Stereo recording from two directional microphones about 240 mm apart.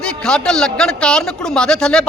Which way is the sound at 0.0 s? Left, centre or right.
Centre.